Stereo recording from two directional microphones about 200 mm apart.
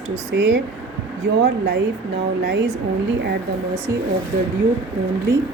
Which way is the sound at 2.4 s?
60° right (ahead or behind).